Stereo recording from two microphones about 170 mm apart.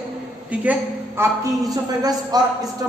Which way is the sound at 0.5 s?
10° right (ahead or behind).